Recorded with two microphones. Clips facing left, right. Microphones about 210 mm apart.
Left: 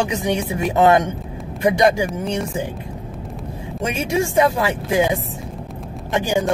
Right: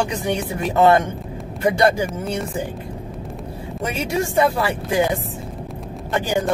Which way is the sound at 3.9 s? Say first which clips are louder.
Left 2 dB; 15° left (ahead or behind).